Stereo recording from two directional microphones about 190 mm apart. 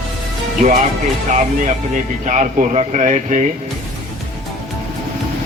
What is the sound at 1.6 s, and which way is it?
Speech, 40° right (ahead or behind).